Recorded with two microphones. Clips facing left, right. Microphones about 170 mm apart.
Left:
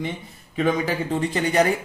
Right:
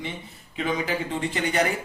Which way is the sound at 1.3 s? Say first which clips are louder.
Left 4 dB; 35° left (ahead or behind).